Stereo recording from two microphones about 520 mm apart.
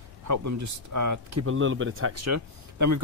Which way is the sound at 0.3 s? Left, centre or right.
Right.